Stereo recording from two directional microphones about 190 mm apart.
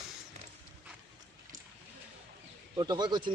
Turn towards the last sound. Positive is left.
turn(degrees=-20)  # may be behind; listen again after turning